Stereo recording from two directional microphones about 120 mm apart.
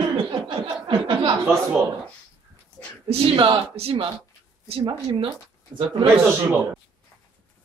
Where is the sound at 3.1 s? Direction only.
45° right (ahead or behind).